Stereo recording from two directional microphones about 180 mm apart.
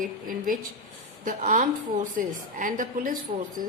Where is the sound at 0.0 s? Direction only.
50° right (ahead or behind).